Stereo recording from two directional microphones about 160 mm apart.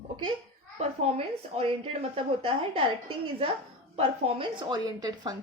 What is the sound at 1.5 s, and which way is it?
A woman's voice, 40° right (ahead or behind).